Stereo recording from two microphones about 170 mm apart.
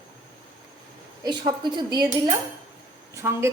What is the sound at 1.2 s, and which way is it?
Speech, 25° right (ahead or behind).